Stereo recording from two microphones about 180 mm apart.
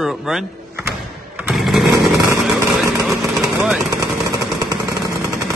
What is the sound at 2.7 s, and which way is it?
Vehicle, centre (ahead or behind).